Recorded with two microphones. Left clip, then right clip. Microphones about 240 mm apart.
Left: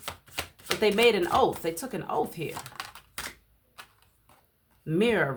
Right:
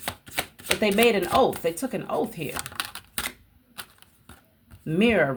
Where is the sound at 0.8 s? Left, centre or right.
Centre.